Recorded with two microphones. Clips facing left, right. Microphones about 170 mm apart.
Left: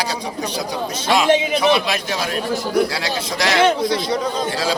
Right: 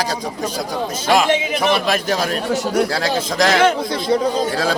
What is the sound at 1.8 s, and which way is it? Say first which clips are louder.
Speech: right 3 dB; 50° right (ahead or behind).